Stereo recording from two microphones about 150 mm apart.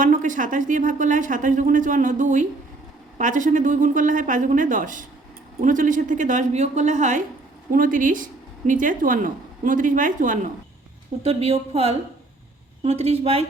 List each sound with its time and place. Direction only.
0.0 s speech: 60° right (ahead or behind)
7.7 s speech: 65° right (ahead or behind)
11.2 s a woman's voice: 40° right (ahead or behind)